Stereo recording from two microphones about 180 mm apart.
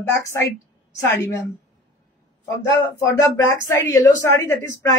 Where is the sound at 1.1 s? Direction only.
15° left (ahead or behind).